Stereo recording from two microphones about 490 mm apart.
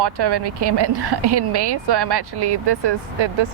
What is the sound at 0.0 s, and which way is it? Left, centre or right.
Speech, right.